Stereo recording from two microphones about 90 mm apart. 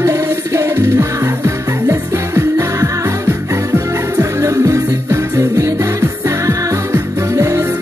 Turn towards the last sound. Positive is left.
turn(degrees=-35)  # may be behind; listen again after turning